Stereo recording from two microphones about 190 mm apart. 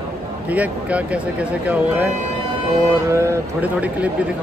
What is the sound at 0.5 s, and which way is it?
A man's voice, 5° right (ahead or behind).